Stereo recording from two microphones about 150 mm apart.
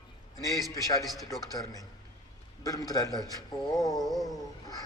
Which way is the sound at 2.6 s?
25° left (ahead or behind).